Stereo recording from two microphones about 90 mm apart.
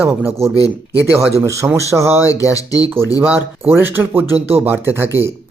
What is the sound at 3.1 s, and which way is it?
Speech, 25° right (ahead or behind).